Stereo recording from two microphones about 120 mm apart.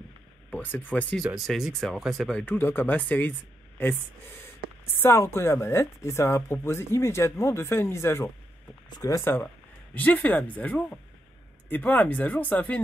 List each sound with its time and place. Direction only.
0.5 s speech: 15° left (ahead or behind)
1.1 s speech: centre (ahead or behind)
5.0 s speech: 25° left (ahead or behind)